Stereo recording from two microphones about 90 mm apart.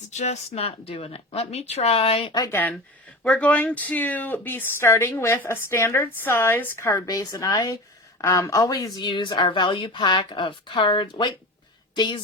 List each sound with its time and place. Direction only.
0.6 s speech: 90° left
2.5 s a woman's voice: 20° left (ahead or behind); by 12.2 s 60° left (ahead or behind)